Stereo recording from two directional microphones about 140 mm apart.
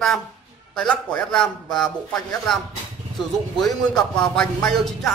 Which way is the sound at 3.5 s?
5° left (ahead or behind).